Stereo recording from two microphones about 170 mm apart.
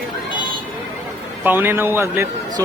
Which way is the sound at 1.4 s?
10° right (ahead or behind).